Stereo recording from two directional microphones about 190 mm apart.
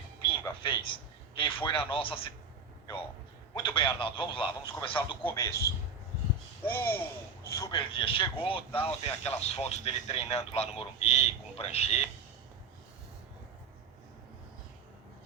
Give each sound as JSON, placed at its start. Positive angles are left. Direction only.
{"t": 0.2, "sound": "a sound", "side_deg": 25}
{"t": 1.4, "sound": "speech", "side_deg": 25}
{"t": 3.8, "sound": "speech", "side_deg": 25}
{"t": 5.2, "sound": "a man's voice", "side_deg": 15}
{"t": 6.7, "sound": "a man's voice", "side_deg": 10}